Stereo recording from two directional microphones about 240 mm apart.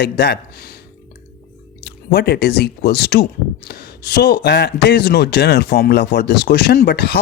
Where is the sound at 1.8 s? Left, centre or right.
Left.